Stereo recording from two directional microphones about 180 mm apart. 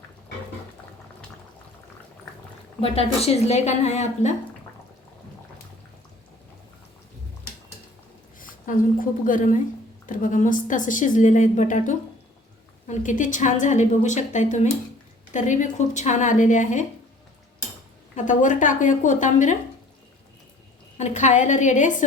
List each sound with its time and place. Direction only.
2.8 s a woman's voice: 35° left (ahead or behind)
8.4 s a woman's voice: 50° left (ahead or behind)
18.2 s a woman's voice: 45° left (ahead or behind)
21.0 s a woman's voice: 40° left (ahead or behind)